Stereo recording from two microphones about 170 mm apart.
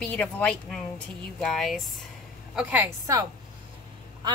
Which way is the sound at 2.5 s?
10° right (ahead or behind).